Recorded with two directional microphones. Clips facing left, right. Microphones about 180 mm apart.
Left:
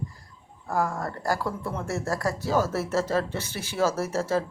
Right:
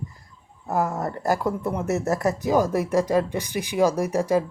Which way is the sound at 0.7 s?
20° right (ahead or behind).